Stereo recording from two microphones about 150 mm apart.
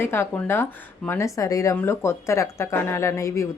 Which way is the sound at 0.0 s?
15° left (ahead or behind).